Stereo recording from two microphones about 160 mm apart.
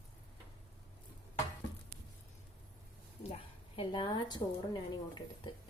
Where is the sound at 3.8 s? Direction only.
30° left (ahead or behind).